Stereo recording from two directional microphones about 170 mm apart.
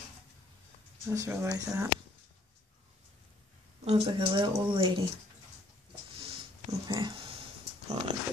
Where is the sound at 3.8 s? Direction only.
30° right (ahead or behind).